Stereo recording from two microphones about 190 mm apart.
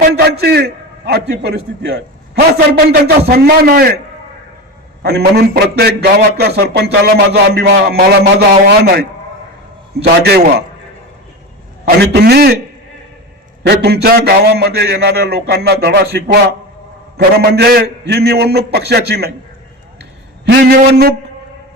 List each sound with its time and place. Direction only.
0.0 s a man's voice: 55° right (ahead or behind)
5.0 s a man's voice: 60° right (ahead or behind)
11.9 s a man's voice: 55° right (ahead or behind)
13.7 s a man's voice: 60° right (ahead or behind)
20.0 s a sound: 60° right (ahead or behind)